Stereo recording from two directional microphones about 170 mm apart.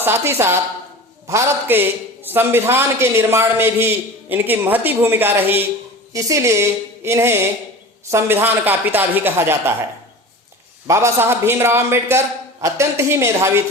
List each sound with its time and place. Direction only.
0.0 s a man's voice: 15° right (ahead or behind)
10.8 s a man's voice: 15° right (ahead or behind)